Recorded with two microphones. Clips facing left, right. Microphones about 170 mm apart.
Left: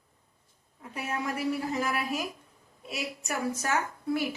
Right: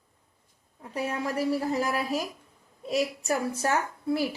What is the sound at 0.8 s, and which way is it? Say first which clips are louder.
A woman's voice: right 3 dB; 35° right (ahead or behind).